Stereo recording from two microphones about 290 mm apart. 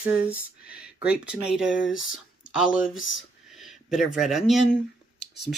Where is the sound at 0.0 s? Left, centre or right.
Centre.